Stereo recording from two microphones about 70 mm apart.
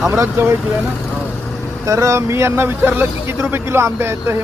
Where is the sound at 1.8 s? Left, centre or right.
Right.